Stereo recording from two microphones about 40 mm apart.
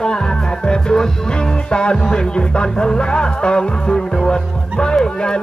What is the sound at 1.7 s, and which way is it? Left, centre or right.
Speech, left.